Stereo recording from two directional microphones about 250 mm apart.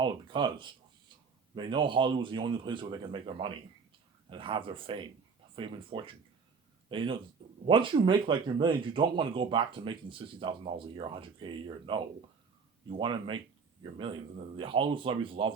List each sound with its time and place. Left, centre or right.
0.0 s speech: centre
14.5 s speech: centre